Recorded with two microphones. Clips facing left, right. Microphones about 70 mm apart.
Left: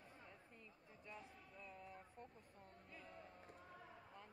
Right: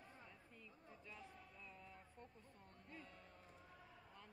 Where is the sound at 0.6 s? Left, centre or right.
Centre.